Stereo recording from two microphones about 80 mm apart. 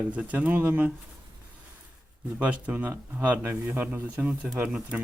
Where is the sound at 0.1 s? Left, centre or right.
Centre.